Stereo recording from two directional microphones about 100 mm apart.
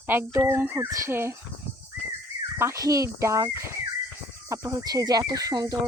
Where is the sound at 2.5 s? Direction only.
30° right (ahead or behind).